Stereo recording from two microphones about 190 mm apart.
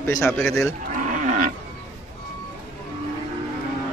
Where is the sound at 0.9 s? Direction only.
40° right (ahead or behind).